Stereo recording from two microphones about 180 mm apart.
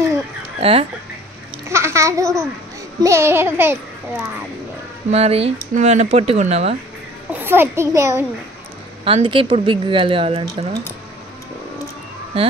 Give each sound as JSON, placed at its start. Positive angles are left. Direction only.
{"t": 0.6, "sound": "speech", "side_deg": -35}
{"t": 1.7, "sound": "babbling", "side_deg": -15}
{"t": 3.0, "sound": "a child's voice", "side_deg": -15}
{"t": 5.1, "sound": "speech", "side_deg": -35}
{"t": 7.3, "sound": "a child's voice", "side_deg": -10}
{"t": 9.0, "sound": "speech", "side_deg": -30}